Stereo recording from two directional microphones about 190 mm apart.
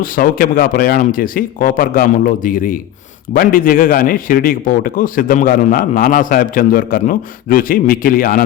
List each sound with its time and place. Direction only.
0.0 s a man's voice: 45° left (ahead or behind)